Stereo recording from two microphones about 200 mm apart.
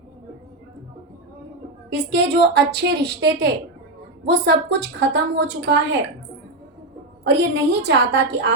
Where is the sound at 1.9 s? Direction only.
60° right (ahead or behind).